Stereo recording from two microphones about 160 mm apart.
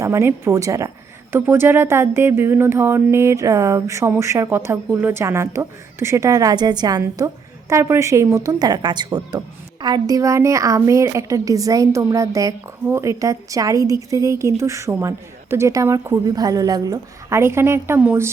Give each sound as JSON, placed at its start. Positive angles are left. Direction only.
{"t": 0.0, "sound": "a woman's voice", "side_deg": -15}